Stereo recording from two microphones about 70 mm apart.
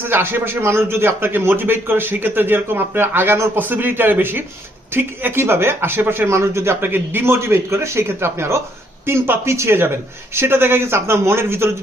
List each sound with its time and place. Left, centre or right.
0.1 s a man's voice: right